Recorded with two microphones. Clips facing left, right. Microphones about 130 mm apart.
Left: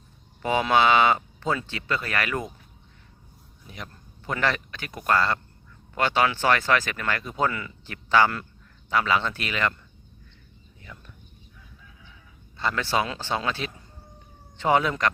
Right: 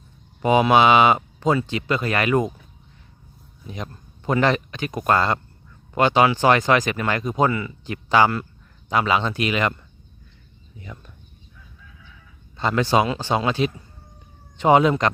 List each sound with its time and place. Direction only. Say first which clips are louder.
0.4 s speech: right 5 dB; 15° right (ahead or behind)
4.3 s speech: right 7 dB; 20° right (ahead or behind)
10.9 s speech: right 5 dB; 35° right (ahead or behind)
12.5 s speech: right 6 dB; 20° right (ahead or behind)